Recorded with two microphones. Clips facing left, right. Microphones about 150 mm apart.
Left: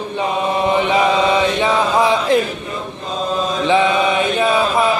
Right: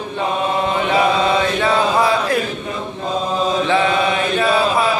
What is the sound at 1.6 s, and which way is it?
Mantra, 20° left (ahead or behind).